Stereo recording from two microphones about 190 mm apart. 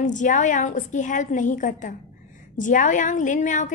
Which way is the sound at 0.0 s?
40° left (ahead or behind).